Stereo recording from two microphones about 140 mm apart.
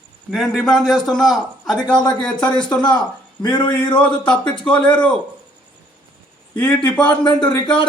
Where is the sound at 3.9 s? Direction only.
35° left (ahead or behind).